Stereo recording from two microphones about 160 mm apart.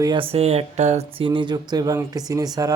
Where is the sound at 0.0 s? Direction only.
30° right (ahead or behind).